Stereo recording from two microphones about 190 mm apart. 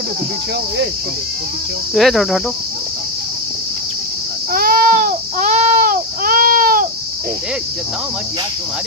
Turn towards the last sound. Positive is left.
turn(degrees=-45)  # may be behind; listen again after turning